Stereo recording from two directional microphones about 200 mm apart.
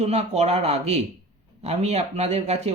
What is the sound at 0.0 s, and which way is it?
A man's voice, 30° right (ahead or behind).